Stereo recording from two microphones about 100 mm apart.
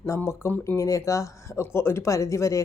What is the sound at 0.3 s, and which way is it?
Speech, 25° left (ahead or behind).